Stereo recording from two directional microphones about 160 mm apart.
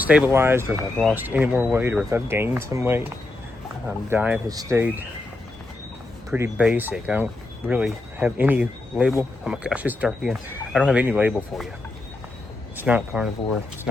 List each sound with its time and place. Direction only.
0.0 s speech: 10° right (ahead or behind)
0.7 s speech: centre (ahead or behind)
1.1 s speech: 10° right (ahead or behind)
4.4 s speech: 20° right (ahead or behind)
6.3 s speech: 10° right (ahead or behind)
12.7 s speech: 10° right (ahead or behind)